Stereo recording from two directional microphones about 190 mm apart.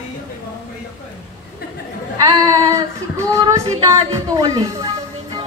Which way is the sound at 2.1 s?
20° right (ahead or behind).